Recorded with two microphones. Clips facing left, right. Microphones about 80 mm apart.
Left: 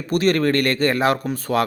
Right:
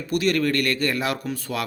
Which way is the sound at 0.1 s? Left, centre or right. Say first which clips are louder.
Left 4 dB; left.